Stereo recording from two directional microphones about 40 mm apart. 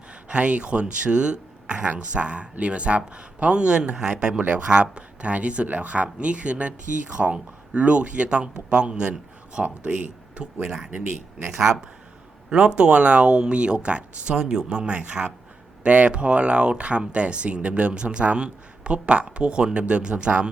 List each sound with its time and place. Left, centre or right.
0.3 s speech: right
4.4 s speech: right
9.6 s speech: right
10.6 s speech: centre
12.5 s speech: right